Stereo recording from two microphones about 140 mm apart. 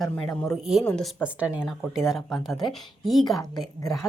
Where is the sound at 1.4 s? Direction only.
10° right (ahead or behind).